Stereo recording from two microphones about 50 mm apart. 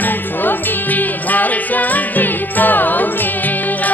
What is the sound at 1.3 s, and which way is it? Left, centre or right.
Music, left.